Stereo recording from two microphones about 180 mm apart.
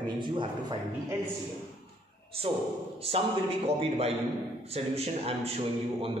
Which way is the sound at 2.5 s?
30° right (ahead or behind).